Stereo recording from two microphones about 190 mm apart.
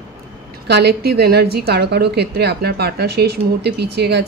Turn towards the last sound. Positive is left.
turn(degrees=-60)  # may be behind; listen again after turning